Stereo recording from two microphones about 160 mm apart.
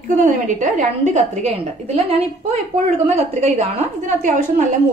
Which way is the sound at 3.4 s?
45° right (ahead or behind).